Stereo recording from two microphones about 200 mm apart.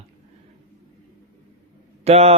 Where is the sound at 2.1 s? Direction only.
30° right (ahead or behind).